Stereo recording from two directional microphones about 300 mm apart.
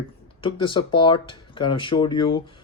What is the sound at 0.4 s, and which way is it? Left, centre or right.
Speech, centre.